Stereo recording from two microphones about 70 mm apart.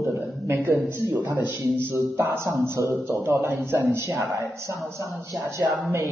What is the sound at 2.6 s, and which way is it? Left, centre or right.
A man's voice, right.